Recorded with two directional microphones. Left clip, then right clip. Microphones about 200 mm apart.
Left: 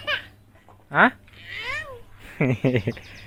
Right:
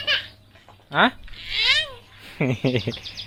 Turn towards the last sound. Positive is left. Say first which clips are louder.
# even
turn(degrees=-5)  # may be behind; listen again after turning